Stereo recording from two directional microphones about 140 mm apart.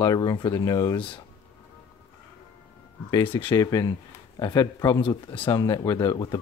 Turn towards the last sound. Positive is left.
turn(degrees=30)  # may be behind; listen again after turning